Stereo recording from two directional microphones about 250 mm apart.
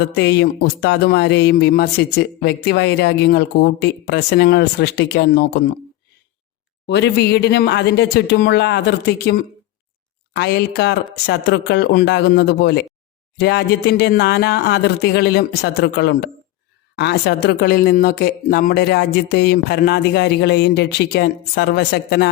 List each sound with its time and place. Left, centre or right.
0.2 s speech: left
6.8 s speech: left